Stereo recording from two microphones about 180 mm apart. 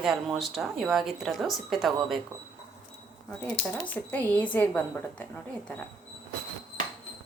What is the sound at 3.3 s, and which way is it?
Speech, 5° left (ahead or behind).